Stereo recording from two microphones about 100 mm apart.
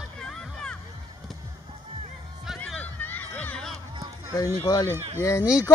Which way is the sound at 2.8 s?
20° left (ahead or behind).